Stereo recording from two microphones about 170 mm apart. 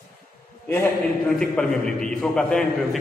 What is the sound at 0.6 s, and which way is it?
Speech, 15° left (ahead or behind).